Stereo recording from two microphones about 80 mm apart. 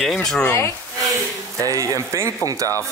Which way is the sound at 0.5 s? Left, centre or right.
Left.